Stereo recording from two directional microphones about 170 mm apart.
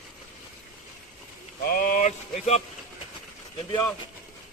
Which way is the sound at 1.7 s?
55° left (ahead or behind).